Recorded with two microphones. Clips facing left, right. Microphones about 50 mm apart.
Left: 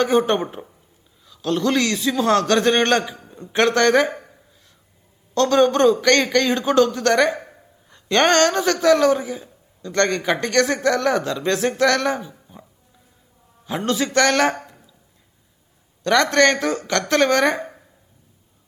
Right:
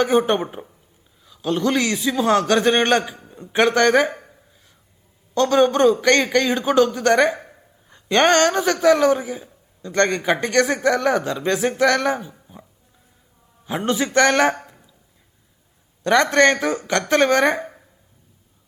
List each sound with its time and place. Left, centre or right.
0.0 s a man's voice: centre
5.3 s a man's voice: centre
12.3 s dog: centre
13.7 s speech: right
16.0 s speech: right